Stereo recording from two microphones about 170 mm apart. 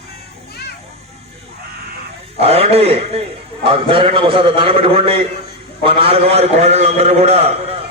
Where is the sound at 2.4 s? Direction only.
35° right (ahead or behind).